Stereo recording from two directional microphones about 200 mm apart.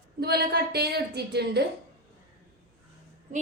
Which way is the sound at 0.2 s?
55° right (ahead or behind).